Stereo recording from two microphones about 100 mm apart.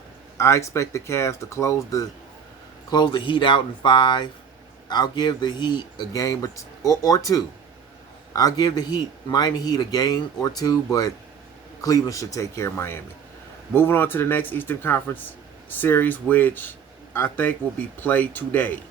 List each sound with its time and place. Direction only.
0.3 s a man's voice: 30° left (ahead or behind)
2.9 s a man's voice: 50° left (ahead or behind); by 18.8 s 15° left (ahead or behind)